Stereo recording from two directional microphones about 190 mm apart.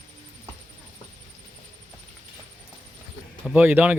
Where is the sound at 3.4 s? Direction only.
10° right (ahead or behind).